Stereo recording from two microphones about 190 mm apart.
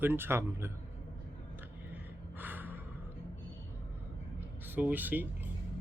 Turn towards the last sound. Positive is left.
turn(degrees=-10)  # may be behind; listen again after turning